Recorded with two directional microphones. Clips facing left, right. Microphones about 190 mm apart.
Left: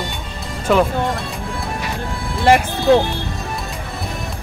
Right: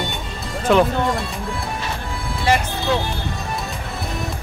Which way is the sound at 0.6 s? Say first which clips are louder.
Even; centre (ahead or behind).